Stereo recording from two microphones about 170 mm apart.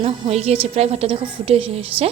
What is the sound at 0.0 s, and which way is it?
A woman's voice, 35° right (ahead or behind).